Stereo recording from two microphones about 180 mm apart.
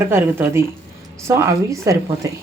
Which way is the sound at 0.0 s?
15° right (ahead or behind).